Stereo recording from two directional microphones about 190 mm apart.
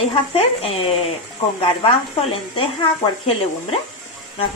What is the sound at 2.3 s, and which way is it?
Speech, 30° left (ahead or behind).